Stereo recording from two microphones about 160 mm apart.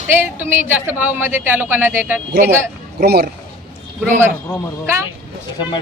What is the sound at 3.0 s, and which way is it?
Speech, 90° right.